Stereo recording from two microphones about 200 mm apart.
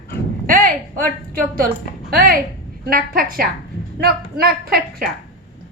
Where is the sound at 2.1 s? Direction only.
50° right (ahead or behind).